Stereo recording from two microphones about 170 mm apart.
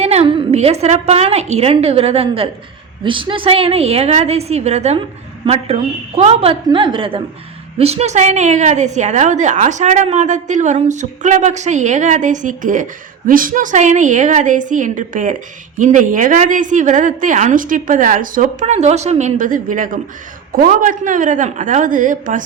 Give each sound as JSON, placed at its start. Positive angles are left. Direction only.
{"t": 0.0, "sound": "a woman's voice", "side_deg": -40}